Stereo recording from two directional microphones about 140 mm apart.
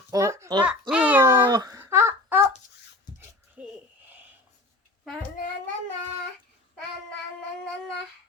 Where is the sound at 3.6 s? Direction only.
5° right (ahead or behind).